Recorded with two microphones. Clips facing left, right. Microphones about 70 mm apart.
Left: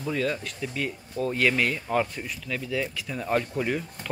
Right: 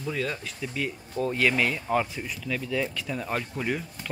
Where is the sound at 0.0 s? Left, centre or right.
Centre.